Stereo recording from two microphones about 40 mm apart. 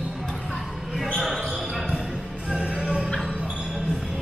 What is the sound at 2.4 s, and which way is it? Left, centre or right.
Music, right.